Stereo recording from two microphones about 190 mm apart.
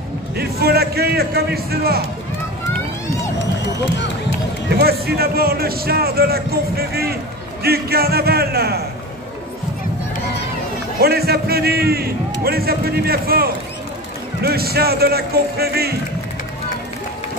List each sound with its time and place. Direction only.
0.4 s a man's voice: 55° right (ahead or behind)
4.7 s a man's voice: 55° right (ahead or behind)
11.0 s a man's voice: 55° right (ahead or behind)